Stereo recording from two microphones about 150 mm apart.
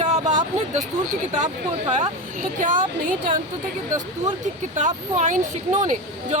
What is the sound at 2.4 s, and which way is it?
Speech, 60° right (ahead or behind).